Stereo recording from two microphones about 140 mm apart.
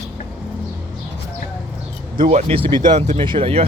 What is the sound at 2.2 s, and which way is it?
Speech, 35° right (ahead or behind).